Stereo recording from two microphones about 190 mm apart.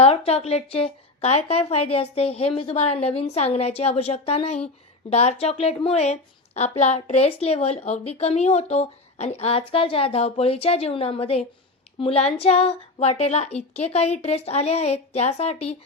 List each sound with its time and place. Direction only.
0.0 s a woman's voice: 30° left (ahead or behind)